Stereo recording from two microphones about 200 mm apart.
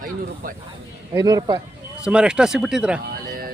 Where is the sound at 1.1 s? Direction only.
20° right (ahead or behind).